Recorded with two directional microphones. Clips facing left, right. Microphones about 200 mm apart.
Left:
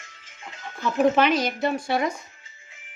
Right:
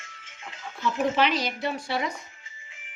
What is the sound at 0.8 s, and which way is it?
Speech, 50° left (ahead or behind).